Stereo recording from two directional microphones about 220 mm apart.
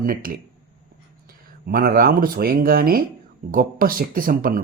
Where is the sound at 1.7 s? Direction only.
40° right (ahead or behind).